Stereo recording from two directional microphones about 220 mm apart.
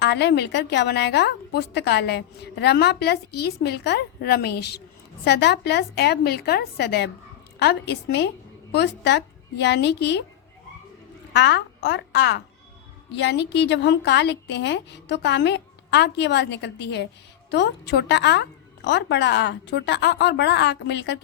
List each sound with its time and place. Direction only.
0.0 s a woman's voice: 50° left (ahead or behind)
11.3 s a child's voice: 55° left (ahead or behind)